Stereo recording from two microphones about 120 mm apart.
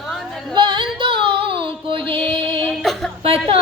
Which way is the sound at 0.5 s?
45° right (ahead or behind).